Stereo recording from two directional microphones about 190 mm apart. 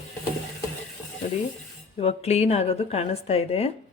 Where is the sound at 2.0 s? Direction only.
35° left (ahead or behind).